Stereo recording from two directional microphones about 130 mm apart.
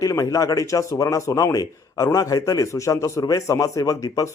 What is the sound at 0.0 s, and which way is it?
Speech, 25° left (ahead or behind).